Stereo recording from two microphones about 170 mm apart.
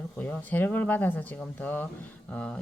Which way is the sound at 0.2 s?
10° left (ahead or behind).